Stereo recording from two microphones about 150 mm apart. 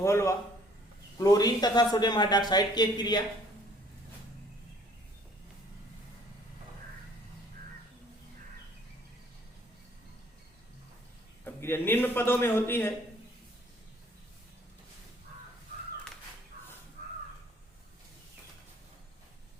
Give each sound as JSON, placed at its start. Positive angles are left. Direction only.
{"t": 0.0, "sound": "speech", "side_deg": 20}
{"t": 11.4, "sound": "speech", "side_deg": 15}